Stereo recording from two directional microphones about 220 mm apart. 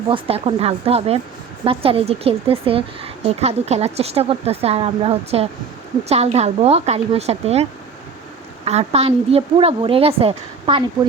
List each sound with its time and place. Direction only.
0.1 s a woman's voice: 25° right (ahead or behind)